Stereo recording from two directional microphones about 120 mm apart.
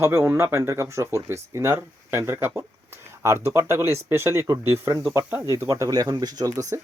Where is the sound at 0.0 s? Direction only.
25° right (ahead or behind).